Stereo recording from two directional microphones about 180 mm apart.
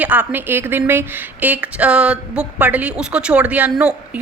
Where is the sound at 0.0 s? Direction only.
10° right (ahead or behind).